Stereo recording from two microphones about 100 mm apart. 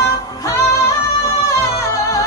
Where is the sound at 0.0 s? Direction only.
30° left (ahead or behind).